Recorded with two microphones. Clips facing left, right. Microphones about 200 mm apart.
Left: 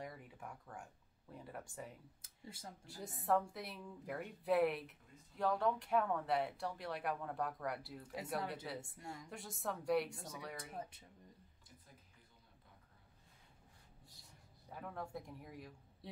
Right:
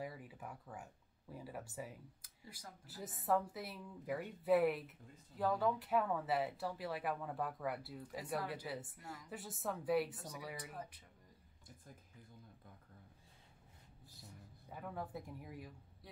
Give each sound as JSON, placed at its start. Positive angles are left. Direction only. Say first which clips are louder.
{"t": 0.0, "sound": "a sound", "louder": "right 2 dB", "side_deg": -5}
{"t": 1.3, "sound": "speech", "louder": "right 2 dB", "side_deg": -5}
{"t": 2.2, "sound": "speech", "louder": "left 5 dB", "side_deg": 25}
{"t": 2.9, "sound": "speech", "louder": "even", "side_deg": 0}
{"t": 14.7, "sound": "speech", "louder": "right 1 dB", "side_deg": 0}